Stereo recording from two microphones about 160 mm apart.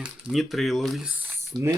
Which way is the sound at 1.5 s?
25° right (ahead or behind).